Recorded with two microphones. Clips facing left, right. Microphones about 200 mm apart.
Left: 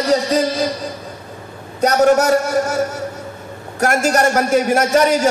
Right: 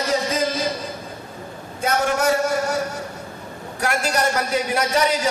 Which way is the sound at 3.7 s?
45° left (ahead or behind).